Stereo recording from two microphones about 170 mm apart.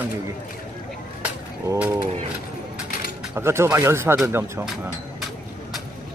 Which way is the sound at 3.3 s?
15° right (ahead or behind).